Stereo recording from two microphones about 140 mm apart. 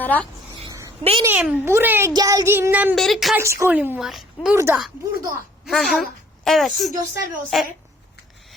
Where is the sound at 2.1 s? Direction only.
25° right (ahead or behind).